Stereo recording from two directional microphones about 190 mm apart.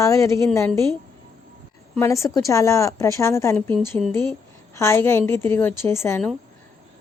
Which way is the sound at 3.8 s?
Centre (ahead or behind).